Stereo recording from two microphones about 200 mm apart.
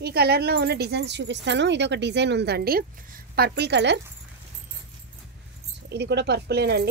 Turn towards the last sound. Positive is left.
turn(degrees=-55)  # may be behind; listen again after turning